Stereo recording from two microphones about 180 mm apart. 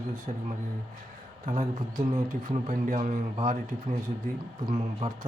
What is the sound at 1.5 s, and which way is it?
Speech, 50° right (ahead or behind).